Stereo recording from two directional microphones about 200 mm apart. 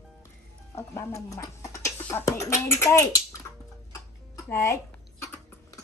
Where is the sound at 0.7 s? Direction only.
15° left (ahead or behind).